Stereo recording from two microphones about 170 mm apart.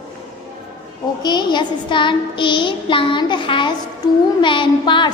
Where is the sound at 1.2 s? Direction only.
25° left (ahead or behind).